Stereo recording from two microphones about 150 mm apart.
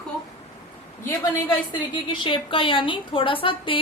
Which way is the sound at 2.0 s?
35° left (ahead or behind).